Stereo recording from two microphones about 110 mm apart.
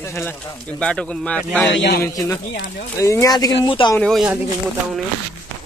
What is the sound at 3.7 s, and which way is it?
Speech, 50° left (ahead or behind).